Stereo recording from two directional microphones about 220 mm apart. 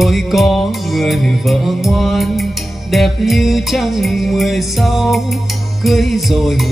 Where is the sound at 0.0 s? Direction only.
Centre (ahead or behind).